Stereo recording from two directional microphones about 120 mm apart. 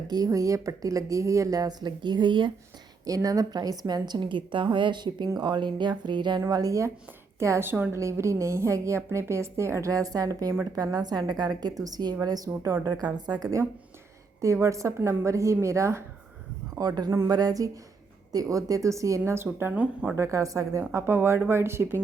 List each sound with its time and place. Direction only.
0.1 s a woman's voice: 30° right (ahead or behind)
3.1 s a woman's voice: 30° right (ahead or behind)
6.5 s a woman's voice: 30° right (ahead or behind)
17.1 s a woman's voice: 20° right (ahead or behind)
20.1 s a woman's voice: 25° right (ahead or behind)